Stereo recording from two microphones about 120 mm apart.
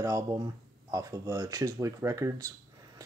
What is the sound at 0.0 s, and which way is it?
Speech, 30° right (ahead or behind).